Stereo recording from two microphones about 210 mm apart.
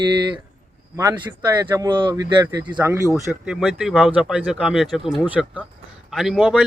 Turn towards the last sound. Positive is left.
turn(degrees=-5)  # may be behind; listen again after turning